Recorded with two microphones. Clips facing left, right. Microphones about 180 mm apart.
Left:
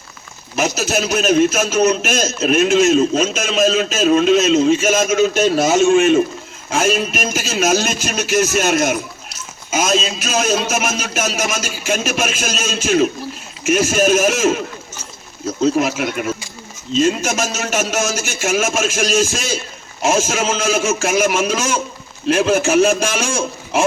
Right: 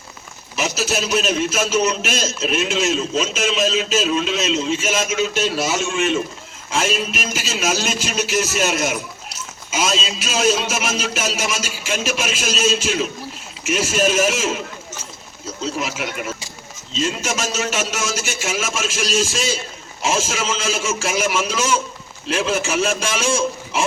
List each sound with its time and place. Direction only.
0.5 s a man's voice: 50° left (ahead or behind)
15.6 s a man's voice: 50° left (ahead or behind)